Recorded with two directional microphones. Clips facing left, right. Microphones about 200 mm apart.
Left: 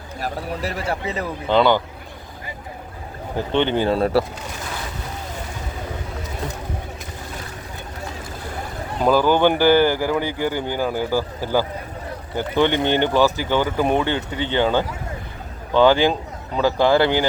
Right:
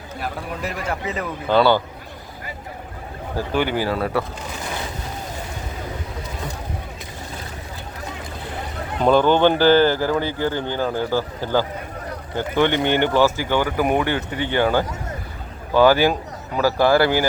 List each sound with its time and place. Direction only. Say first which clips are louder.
0.2 s a man's voice: left 2 dB; 35° left (ahead or behind)
1.5 s speech: even; 20° left (ahead or behind)
3.3 s speech: left 2 dB; 25° left (ahead or behind)
9.0 s speech: right 1 dB; 5° left (ahead or behind)
15.8 s speech: even; 20° left (ahead or behind)